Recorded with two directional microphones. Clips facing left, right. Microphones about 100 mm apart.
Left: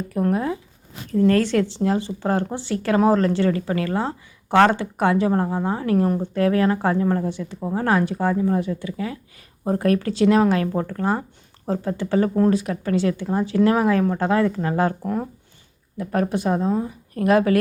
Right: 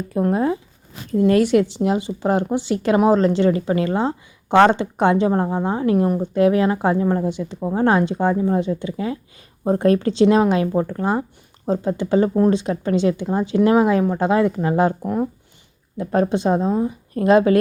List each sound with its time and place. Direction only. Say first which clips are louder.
0.1 s speech: right 3 dB; 25° right (ahead or behind)
1.2 s speech: right 3 dB; 15° right (ahead or behind)
16.0 s speech: right 4 dB; 25° right (ahead or behind)